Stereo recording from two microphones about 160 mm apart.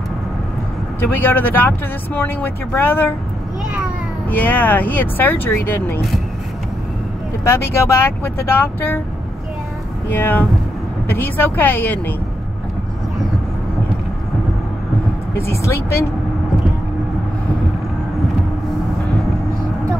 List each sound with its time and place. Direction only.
1.1 s speech: 10° left (ahead or behind)
4.3 s speech: 10° left (ahead or behind)
7.4 s speech: 15° left (ahead or behind)
10.0 s speech: 15° left (ahead or behind)
15.3 s speech: 15° left (ahead or behind)